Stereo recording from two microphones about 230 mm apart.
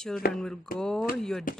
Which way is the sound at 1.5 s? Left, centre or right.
Left.